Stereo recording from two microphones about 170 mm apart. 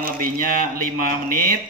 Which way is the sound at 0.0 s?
55° right (ahead or behind).